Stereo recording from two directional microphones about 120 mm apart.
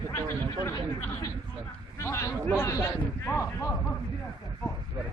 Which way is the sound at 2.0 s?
25° left (ahead or behind).